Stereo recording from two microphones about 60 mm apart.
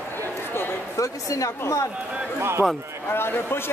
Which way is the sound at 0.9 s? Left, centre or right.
Left.